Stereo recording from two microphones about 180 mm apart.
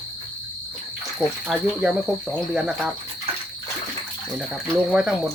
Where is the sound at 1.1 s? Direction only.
Centre (ahead or behind).